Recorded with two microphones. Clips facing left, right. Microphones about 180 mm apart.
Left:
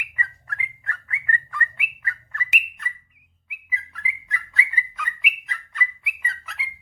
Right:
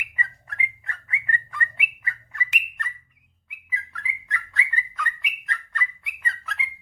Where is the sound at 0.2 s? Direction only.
20° right (ahead or behind).